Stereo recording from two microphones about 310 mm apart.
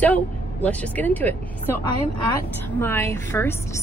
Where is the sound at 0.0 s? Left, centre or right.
Centre.